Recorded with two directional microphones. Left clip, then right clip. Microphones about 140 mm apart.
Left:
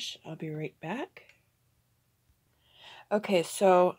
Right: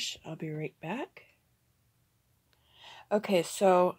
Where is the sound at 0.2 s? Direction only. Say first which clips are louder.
Even; centre (ahead or behind).